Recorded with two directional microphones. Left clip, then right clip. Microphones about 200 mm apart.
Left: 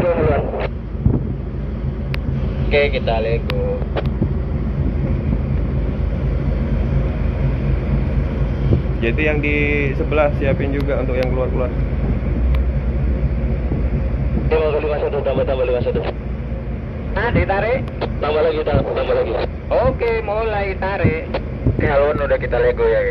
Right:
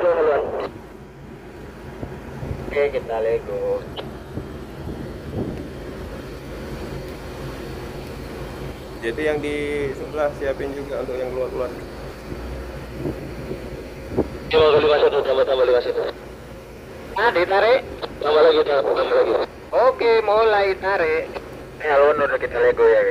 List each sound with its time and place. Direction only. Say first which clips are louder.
0.0 s radio: even; 40° right (ahead or behind)
2.7 s speech: left 4 dB; 35° right (ahead or behind)
9.0 s speech: left 3 dB; 35° right (ahead or behind)
14.5 s speech: right 3 dB; 85° right
17.1 s speech: right 1 dB; 70° right (ahead or behind)
21.8 s speech: right 1 dB; 45° right (ahead or behind)